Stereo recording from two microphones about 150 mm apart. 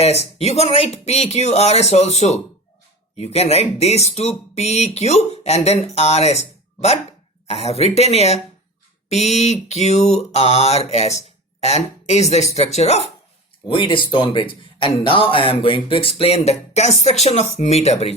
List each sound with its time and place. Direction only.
0.0 s mantra: 45° left (ahead or behind)
7.4 s mantra: 45° left (ahead or behind)
13.7 s speech: 35° left (ahead or behind)